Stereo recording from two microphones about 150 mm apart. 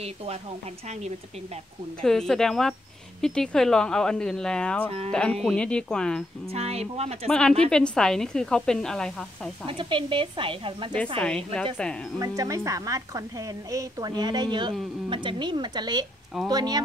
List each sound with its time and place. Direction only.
0.0 s speech: 45° right (ahead or behind)
2.0 s speech: 5° left (ahead or behind)
6.5 s speech: 45° right (ahead or behind)
7.2 s speech: 5° left (ahead or behind)
9.7 s speech: 35° right (ahead or behind)
11.1 s a woman's voice: 5° left (ahead or behind)
12.2 s a woman's voice: 20° right (ahead or behind)